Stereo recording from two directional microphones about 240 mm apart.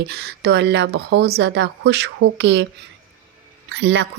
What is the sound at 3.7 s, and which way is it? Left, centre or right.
Speech, right.